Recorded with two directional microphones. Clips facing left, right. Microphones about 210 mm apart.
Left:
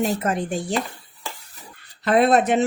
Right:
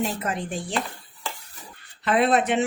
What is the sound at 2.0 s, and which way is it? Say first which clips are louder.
Speech: left 4 dB; 40° left (ahead or behind).